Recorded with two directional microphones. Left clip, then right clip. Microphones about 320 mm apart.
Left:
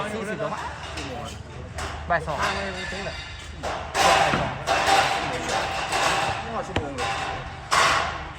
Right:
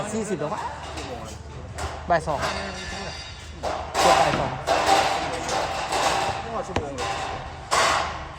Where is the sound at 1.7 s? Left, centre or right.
Right.